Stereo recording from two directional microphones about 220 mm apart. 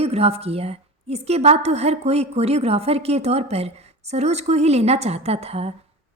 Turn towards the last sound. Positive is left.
turn(degrees=-25)  # may be behind; listen again after turning